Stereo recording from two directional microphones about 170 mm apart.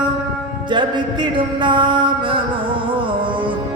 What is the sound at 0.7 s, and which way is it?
Music, 25° right (ahead or behind).